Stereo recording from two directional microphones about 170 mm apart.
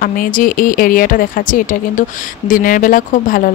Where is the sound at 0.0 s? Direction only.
55° left (ahead or behind).